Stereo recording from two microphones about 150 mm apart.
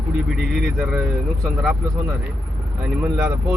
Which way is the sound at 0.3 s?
Centre (ahead or behind).